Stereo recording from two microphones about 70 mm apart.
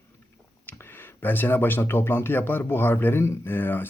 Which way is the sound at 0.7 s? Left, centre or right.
Left.